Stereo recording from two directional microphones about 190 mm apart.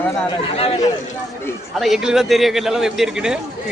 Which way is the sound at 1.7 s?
Centre (ahead or behind).